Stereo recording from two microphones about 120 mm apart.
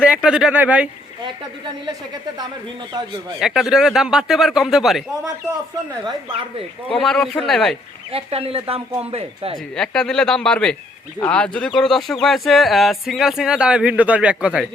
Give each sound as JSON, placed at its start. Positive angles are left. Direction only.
{"t": 0.0, "sound": "speech", "side_deg": -5}
{"t": 3.4, "sound": "speech", "side_deg": -5}
{"t": 6.9, "sound": "speech", "side_deg": 5}
{"t": 8.1, "sound": "speech", "side_deg": -55}
{"t": 9.7, "sound": "speech", "side_deg": 5}